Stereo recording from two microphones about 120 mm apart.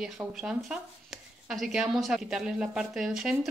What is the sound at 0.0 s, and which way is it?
Speech, 5° right (ahead or behind).